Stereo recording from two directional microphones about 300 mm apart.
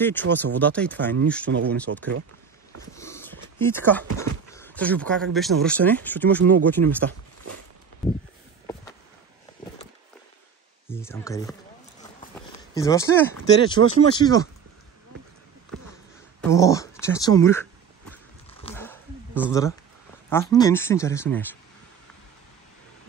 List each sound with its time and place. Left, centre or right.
0.0 s speech: centre
3.0 s sniff: centre
3.5 s speech: centre
10.9 s speech: centre
12.7 s speech: centre
16.3 s speech: centre
18.5 s a sound: centre
18.8 s a sound: centre
20.2 s speech: centre